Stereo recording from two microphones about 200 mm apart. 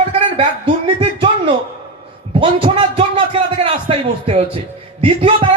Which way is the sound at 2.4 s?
25° right (ahead or behind).